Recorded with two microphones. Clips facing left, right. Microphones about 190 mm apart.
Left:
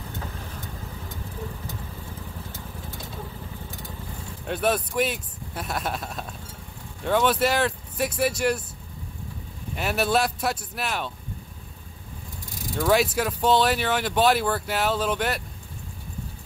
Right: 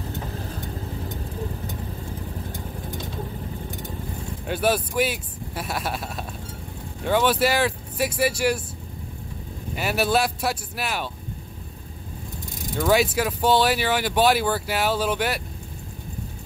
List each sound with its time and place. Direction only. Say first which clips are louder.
0.3 s vehicle: right 6 dB; 35° right (ahead or behind)
4.5 s speech: right 1 dB; 5° right (ahead or behind)
9.8 s speech: right 1 dB; 5° right (ahead or behind)
12.7 s speech: right 1 dB; centre (ahead or behind)